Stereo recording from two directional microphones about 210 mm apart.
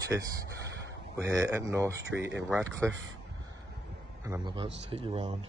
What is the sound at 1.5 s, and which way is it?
Speech, 15° right (ahead or behind).